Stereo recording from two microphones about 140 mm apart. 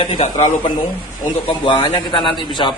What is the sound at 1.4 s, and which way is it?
A man's voice, 35° left (ahead or behind).